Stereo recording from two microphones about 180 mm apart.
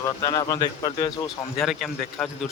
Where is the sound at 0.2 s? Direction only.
20° left (ahead or behind).